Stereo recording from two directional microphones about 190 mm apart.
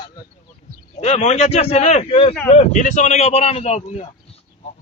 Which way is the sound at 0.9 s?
35° left (ahead or behind).